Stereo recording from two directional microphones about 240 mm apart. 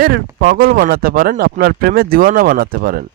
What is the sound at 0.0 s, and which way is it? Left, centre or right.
Speech, right.